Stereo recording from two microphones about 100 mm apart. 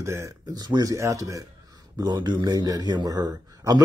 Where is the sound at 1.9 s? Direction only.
45° right (ahead or behind).